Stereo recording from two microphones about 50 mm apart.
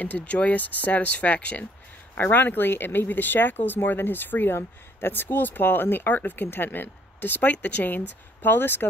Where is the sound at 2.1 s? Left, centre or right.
Left.